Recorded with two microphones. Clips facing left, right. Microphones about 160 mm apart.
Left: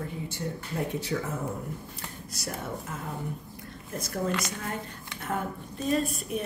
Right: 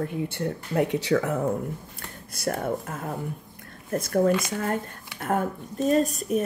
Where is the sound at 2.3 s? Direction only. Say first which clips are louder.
Right 9 dB; 55° right (ahead or behind).